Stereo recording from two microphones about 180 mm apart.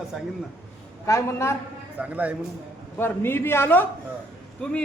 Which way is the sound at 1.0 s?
15° left (ahead or behind).